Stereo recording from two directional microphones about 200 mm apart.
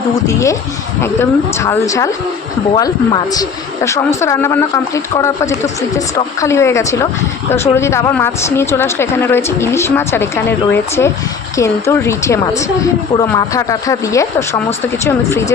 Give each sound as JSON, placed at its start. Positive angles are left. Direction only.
{"t": 0.1, "sound": "speech", "side_deg": 15}